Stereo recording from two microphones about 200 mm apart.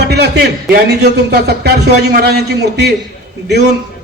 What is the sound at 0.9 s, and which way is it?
A man's voice, 55° right (ahead or behind).